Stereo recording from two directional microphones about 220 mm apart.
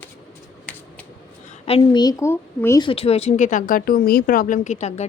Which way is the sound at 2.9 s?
25° left (ahead or behind).